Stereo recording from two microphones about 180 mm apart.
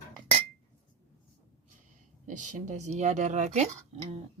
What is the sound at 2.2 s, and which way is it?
Speech, 45° right (ahead or behind).